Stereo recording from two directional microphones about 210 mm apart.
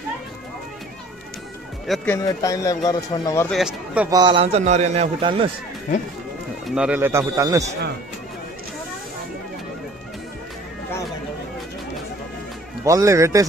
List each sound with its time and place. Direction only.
1.9 s speech: centre (ahead or behind)
2.2 s speech: 15° left (ahead or behind)
3.4 s speech: centre (ahead or behind)
4.1 s a man's voice: 20° right (ahead or behind)
6.7 s speech: 5° right (ahead or behind)
12.8 s speech: 15° right (ahead or behind)